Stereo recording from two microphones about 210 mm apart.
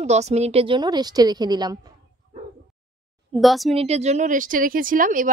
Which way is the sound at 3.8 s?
30° right (ahead or behind).